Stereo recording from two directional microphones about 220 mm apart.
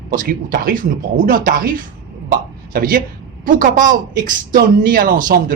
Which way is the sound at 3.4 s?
40° right (ahead or behind).